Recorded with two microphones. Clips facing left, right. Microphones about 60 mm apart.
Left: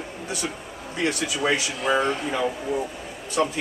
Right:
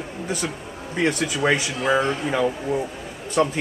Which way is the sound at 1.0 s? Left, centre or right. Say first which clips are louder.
Right 3 dB; right.